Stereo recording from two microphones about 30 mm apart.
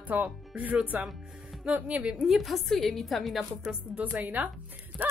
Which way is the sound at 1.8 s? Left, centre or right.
Right.